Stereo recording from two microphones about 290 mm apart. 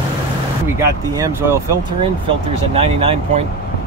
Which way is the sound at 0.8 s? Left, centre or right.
Centre.